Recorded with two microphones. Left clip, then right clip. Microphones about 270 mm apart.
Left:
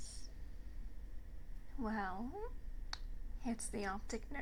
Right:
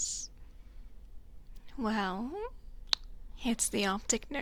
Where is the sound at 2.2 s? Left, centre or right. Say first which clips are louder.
Right 8 dB; right.